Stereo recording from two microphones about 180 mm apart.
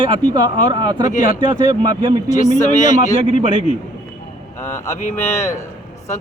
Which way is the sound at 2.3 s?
40° left (ahead or behind).